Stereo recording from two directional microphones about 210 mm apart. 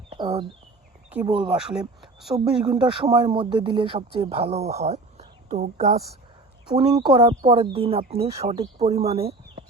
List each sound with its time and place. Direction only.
0.1 s a sound: 30° right (ahead or behind)
1.2 s speech: 20° right (ahead or behind)
1.5 s speech: 5° right (ahead or behind)
2.6 s speech: 20° right (ahead or behind)
6.7 s speech: 20° right (ahead or behind)